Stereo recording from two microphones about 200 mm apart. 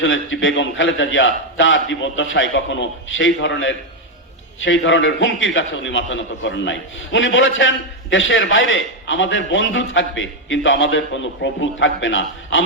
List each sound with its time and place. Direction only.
0.0 s a man's voice: 75° left (ahead or behind)